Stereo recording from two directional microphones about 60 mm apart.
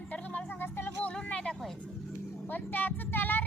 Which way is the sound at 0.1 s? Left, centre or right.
Left.